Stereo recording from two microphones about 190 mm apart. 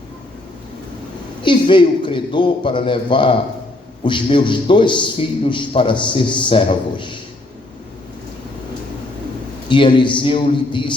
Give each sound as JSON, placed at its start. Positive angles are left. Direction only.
{"t": 1.4, "sound": "a man's voice", "side_deg": 25}
{"t": 9.6, "sound": "a man's voice", "side_deg": 25}